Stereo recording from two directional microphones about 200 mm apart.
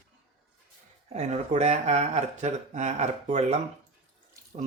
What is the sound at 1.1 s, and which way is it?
Speech, 35° right (ahead or behind).